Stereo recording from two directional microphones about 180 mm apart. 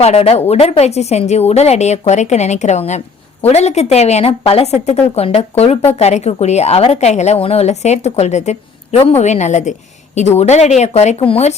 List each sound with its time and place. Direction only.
0.0 s a woman's voice: 35° left (ahead or behind)